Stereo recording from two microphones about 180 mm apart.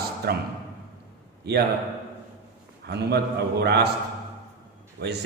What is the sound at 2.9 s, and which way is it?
A man's voice, 65° right (ahead or behind).